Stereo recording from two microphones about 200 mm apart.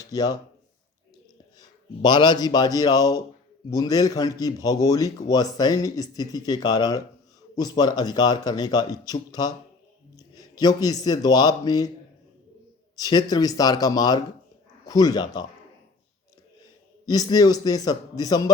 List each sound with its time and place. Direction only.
0.0 s speech: 20° left (ahead or behind)
1.5 s a man's voice: 20° left (ahead or behind)
10.2 s a sound: 20° left (ahead or behind)
10.6 s speech: 20° left (ahead or behind)
13.0 s speech: 20° left (ahead or behind)
17.1 s speech: 20° left (ahead or behind)